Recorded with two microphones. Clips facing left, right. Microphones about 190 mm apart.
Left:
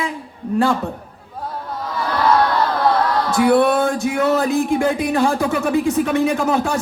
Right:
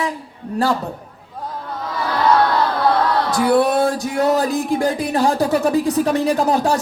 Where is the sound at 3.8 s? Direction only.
35° right (ahead or behind).